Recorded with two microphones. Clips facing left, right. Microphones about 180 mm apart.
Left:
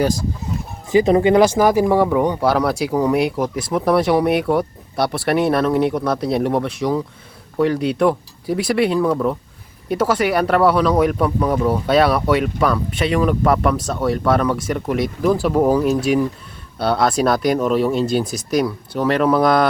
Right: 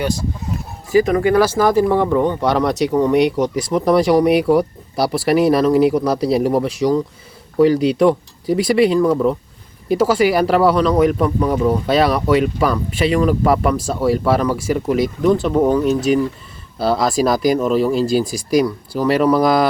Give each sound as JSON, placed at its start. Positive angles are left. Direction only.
{"t": 0.9, "sound": "speech", "side_deg": 25}